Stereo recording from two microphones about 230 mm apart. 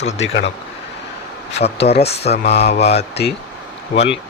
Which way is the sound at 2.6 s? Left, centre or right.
Left.